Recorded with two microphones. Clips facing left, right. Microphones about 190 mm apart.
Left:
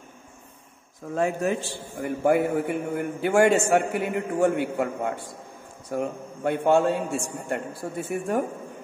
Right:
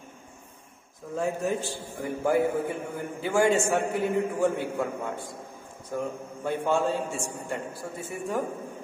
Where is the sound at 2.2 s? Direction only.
65° left (ahead or behind).